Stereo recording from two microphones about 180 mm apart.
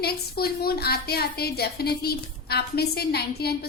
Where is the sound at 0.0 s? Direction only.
60° left (ahead or behind).